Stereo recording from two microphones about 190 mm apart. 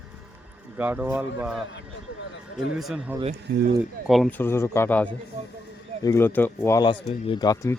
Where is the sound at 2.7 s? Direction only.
5° right (ahead or behind).